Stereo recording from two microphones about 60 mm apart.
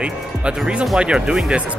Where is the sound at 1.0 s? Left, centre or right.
Centre.